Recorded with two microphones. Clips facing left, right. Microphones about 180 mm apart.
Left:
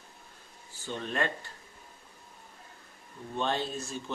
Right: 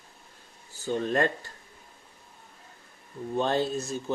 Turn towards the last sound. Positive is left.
turn(degrees=-40)  # may be behind; listen again after turning